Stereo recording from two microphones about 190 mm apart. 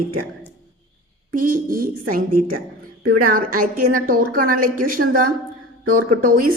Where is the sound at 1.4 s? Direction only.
45° right (ahead or behind).